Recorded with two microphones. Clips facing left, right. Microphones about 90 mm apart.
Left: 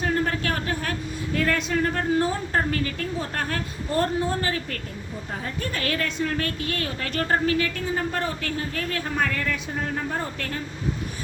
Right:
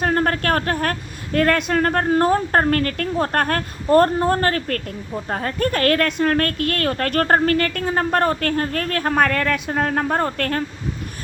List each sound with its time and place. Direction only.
0.0 s speech: 55° right (ahead or behind)